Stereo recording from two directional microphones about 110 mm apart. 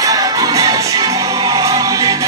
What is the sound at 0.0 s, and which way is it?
Music, 35° right (ahead or behind).